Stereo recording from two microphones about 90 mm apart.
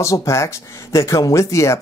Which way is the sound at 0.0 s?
35° left (ahead or behind).